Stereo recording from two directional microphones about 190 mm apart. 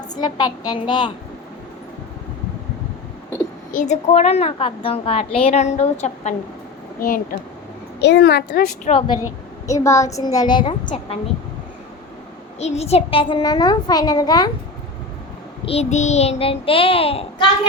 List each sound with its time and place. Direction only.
0.2 s a child's voice: 20° left (ahead or behind)
3.7 s a woman's voice: 40° left (ahead or behind)
7.0 s speech: 45° left (ahead or behind)
8.0 s a woman's voice: 60° left (ahead or behind)
9.6 s a child's voice: 15° left (ahead or behind)
12.5 s a child's voice: 35° left (ahead or behind)
15.6 s a woman's voice: 35° left (ahead or behind)